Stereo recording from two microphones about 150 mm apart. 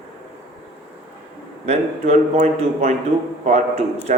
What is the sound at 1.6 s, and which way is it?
Speech, 45° right (ahead or behind).